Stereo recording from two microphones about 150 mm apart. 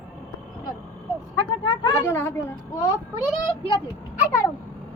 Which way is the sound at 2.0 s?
15° left (ahead or behind).